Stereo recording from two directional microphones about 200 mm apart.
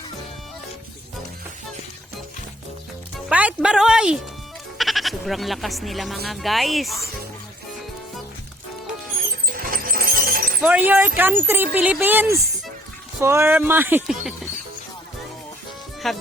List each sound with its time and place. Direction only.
3.2 s speech: 5° right (ahead or behind)
9.5 s a sound: 45° right (ahead or behind)
10.6 s speech: 10° right (ahead or behind)
16.0 s speech: centre (ahead or behind)